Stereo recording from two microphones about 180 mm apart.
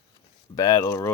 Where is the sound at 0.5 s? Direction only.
20° left (ahead or behind).